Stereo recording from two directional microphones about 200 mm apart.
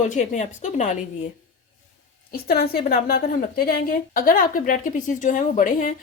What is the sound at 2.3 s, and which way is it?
A woman's voice, 50° left (ahead or behind).